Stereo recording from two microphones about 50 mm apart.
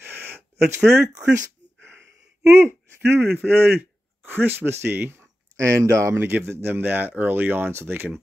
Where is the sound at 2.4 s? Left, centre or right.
Right.